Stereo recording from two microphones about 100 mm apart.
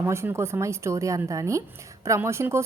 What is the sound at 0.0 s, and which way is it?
A woman's voice, 25° right (ahead or behind).